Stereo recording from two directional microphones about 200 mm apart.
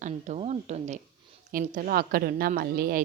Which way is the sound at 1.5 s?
45° right (ahead or behind).